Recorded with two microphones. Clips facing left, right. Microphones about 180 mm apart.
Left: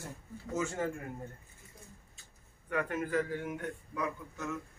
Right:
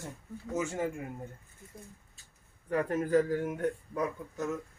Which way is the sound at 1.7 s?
50° right (ahead or behind).